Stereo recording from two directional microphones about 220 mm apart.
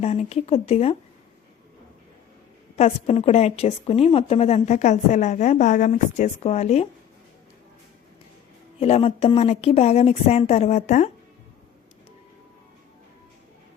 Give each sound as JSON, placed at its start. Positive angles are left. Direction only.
{"t": 0.0, "sound": "a woman's voice", "side_deg": 30}
{"t": 2.7, "sound": "a woman's voice", "side_deg": 30}
{"t": 8.8, "sound": "a woman's voice", "side_deg": 25}